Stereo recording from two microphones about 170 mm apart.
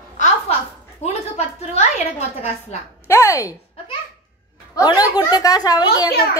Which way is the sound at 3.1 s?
15° left (ahead or behind).